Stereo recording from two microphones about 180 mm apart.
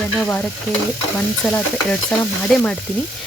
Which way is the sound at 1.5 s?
10° left (ahead or behind).